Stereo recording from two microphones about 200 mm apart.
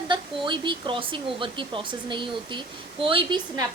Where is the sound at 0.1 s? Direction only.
25° right (ahead or behind).